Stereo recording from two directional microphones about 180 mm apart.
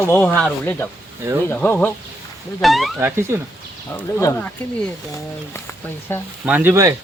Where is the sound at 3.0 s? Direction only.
15° right (ahead or behind).